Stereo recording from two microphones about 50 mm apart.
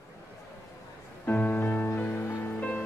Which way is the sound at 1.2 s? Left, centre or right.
Left.